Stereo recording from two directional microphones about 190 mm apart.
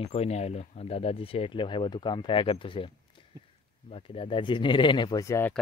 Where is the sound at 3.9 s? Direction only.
30° left (ahead or behind).